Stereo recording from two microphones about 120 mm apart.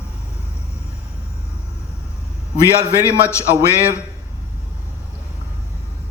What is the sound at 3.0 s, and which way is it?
Speech, 25° left (ahead or behind).